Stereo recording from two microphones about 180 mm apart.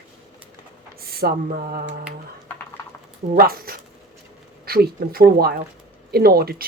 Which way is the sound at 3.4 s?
55° right (ahead or behind).